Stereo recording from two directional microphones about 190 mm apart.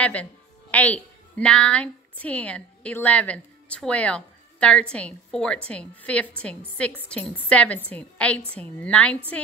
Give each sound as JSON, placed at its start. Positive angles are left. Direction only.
{"t": 0.0, "sound": "a woman's voice", "side_deg": 5}